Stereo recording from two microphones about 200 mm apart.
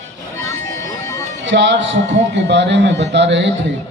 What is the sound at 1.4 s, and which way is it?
A man's voice, 65° right (ahead or behind).